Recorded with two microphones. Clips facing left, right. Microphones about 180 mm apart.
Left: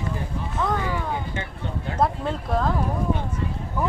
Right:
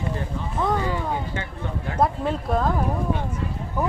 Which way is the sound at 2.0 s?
5° right (ahead or behind).